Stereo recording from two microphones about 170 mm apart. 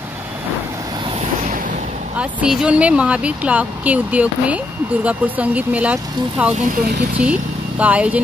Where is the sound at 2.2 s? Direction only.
5° right (ahead or behind).